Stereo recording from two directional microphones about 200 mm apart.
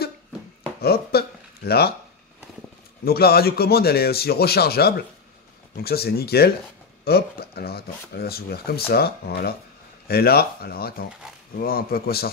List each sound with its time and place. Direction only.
0.7 s speech: 50° left (ahead or behind)
3.1 s speech: 50° left (ahead or behind)